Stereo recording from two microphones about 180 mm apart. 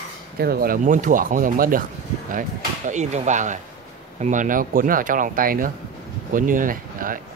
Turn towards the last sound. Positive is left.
turn(degrees=-50)  # may be behind; listen again after turning